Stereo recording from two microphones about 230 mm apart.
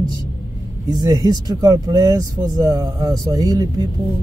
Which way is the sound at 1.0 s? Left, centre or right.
Centre.